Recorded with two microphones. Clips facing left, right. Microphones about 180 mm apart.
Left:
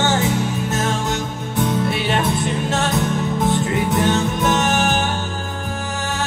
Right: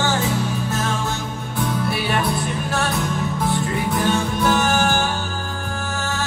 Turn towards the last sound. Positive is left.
turn(degrees=20)  # may be behind; listen again after turning